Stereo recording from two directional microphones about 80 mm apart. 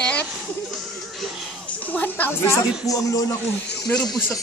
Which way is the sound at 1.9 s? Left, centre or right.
Left.